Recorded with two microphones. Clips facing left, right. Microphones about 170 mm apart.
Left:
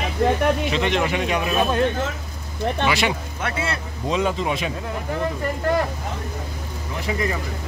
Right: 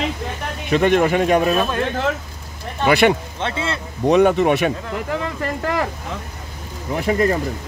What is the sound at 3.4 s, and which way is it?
Speech, 25° right (ahead or behind).